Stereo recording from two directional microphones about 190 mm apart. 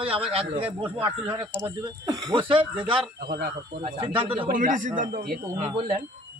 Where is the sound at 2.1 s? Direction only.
25° right (ahead or behind).